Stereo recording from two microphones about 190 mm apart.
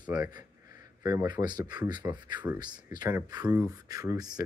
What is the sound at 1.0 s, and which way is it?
Speech, 20° right (ahead or behind).